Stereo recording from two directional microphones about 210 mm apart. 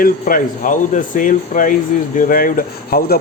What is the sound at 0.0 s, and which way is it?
Speech, 40° left (ahead or behind).